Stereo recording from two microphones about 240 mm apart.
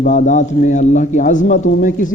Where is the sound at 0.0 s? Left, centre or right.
Left.